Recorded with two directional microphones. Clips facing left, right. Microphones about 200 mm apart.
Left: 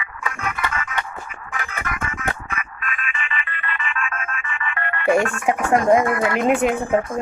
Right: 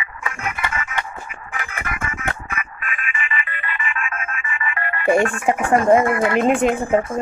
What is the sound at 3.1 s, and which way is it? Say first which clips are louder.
Ringtone: right 2 dB; 5° right (ahead or behind).